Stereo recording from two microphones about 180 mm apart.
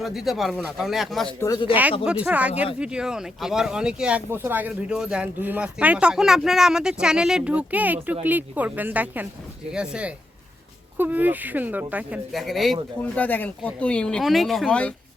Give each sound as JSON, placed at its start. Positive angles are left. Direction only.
{"t": 0.0, "sound": "speech", "side_deg": 0}
{"t": 1.4, "sound": "speech", "side_deg": 20}
{"t": 1.7, "sound": "speech", "side_deg": -10}